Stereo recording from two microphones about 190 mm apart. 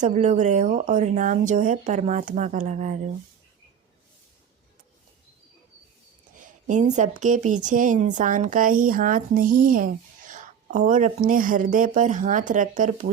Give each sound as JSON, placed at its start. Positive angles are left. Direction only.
{"t": 0.0, "sound": "speech", "side_deg": -40}
{"t": 6.3, "sound": "a woman's voice", "side_deg": -40}